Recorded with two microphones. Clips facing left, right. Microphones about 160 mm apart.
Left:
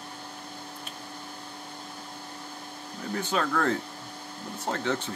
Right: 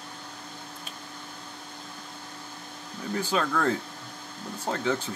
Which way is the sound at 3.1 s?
5° right (ahead or behind).